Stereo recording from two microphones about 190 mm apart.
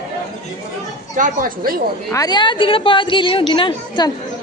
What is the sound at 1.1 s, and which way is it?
Speech, 45° right (ahead or behind).